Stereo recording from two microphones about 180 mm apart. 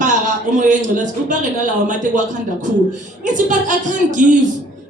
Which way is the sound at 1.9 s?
45° right (ahead or behind).